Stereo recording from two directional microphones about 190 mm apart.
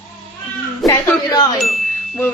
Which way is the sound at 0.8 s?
20° left (ahead or behind).